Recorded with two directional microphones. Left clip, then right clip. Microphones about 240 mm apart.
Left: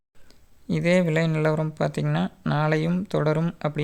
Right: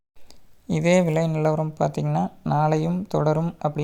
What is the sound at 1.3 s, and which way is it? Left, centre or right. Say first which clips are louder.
Speech: right 1 dB; centre.